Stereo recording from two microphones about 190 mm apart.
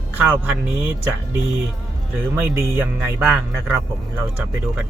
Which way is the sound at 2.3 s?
15° right (ahead or behind).